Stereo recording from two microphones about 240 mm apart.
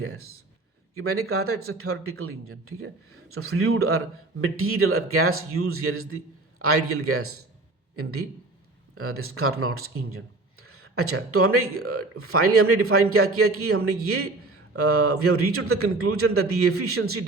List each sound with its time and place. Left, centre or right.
0.9 s speech: right